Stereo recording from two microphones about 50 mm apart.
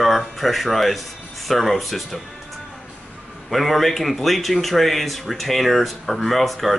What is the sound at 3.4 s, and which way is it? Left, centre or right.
A man's voice, centre.